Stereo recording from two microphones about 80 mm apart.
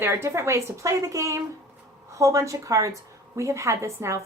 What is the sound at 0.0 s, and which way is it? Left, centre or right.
A woman's voice, right.